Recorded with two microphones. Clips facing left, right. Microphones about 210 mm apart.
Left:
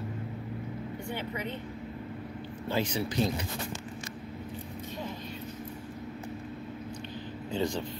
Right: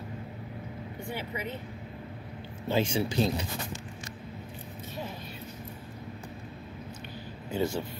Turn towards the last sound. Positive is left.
turn(degrees=-10)  # may be behind; listen again after turning